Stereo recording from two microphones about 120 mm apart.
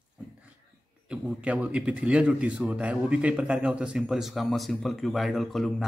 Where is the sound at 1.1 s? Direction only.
10° right (ahead or behind).